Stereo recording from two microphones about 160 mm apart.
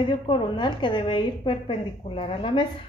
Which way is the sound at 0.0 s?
30° left (ahead or behind).